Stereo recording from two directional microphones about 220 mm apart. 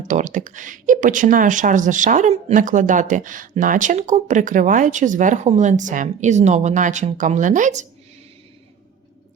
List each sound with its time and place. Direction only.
0.1 s speech: 35° right (ahead or behind)